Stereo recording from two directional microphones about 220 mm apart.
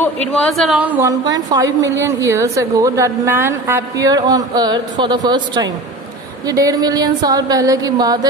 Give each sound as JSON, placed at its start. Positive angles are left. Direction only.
{"t": 0.0, "sound": "a woman's voice", "side_deg": 5}